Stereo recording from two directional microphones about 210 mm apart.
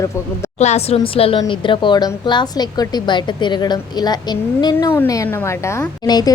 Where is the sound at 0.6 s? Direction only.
30° left (ahead or behind).